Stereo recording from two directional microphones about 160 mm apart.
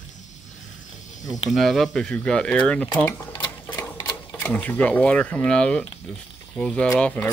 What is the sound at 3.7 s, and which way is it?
Sewing machine, 20° left (ahead or behind).